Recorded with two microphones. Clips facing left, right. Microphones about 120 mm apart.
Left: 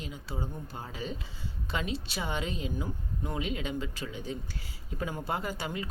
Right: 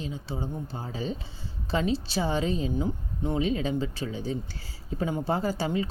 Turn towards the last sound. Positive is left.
turn(degrees=-30)  # may be behind; listen again after turning